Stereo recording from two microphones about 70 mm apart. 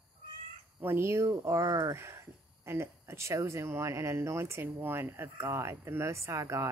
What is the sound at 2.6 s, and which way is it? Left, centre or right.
Speech, right.